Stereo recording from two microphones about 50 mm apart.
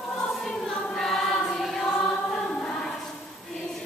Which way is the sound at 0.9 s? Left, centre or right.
Centre.